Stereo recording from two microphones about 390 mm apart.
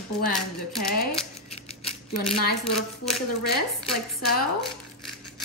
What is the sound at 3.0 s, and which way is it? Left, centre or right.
Speech, centre.